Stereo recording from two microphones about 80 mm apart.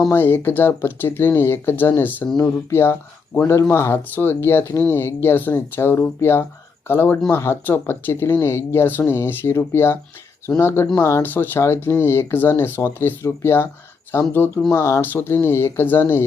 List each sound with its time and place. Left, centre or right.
0.1 s speech: left
11.2 s speech: left
14.7 s speech: left
15.0 s speech: left